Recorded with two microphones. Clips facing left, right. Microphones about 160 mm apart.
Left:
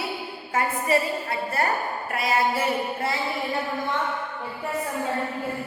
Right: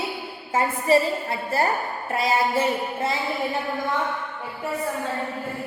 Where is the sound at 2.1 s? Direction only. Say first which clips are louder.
Right 2 dB; 25° right (ahead or behind).